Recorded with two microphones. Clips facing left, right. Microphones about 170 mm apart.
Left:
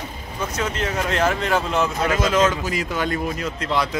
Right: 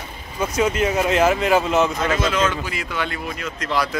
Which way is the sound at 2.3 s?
40° left (ahead or behind).